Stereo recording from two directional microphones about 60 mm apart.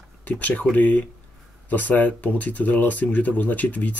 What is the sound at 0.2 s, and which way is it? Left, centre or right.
Speech, left.